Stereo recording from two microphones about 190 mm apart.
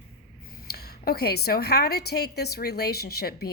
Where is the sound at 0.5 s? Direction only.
55° left (ahead or behind).